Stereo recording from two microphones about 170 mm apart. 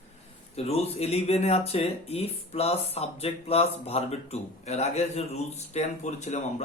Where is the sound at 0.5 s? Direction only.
35° left (ahead or behind).